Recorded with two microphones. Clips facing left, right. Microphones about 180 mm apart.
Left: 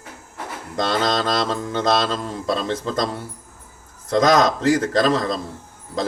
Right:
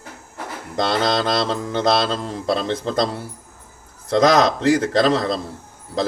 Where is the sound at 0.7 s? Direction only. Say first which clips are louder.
Right 1 dB; 25° right (ahead or behind).